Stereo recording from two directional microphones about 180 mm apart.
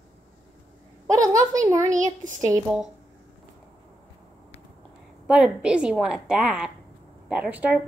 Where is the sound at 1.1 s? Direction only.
20° right (ahead or behind).